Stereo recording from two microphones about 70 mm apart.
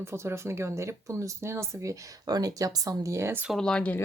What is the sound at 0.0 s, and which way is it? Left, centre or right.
Speech, right.